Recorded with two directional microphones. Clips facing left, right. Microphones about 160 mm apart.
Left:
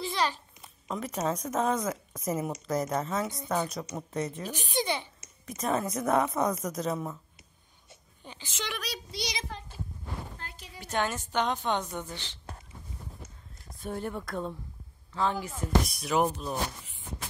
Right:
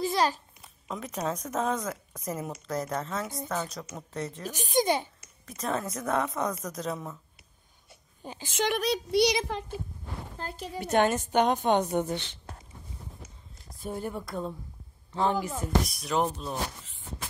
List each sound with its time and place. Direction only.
0.0 s babbling: 40° right (ahead or behind)
0.6 s speech: centre (ahead or behind)
1.8 s speech: 10° left (ahead or behind)
4.5 s a woman's voice: 40° right (ahead or behind)
5.6 s speech: 5° left (ahead or behind)
8.2 s a child's voice: 40° right (ahead or behind); by 9.7 s 65° right (ahead or behind)
10.4 s a woman's voice: 40° right (ahead or behind)
10.8 s a woman's voice: 55° right (ahead or behind)
13.8 s speech: 5° right (ahead or behind)
15.3 s a woman's voice: 45° right (ahead or behind)
15.9 s speech: centre (ahead or behind)